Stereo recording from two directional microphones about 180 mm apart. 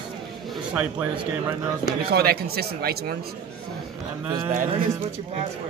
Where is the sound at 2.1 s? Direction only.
60° right (ahead or behind).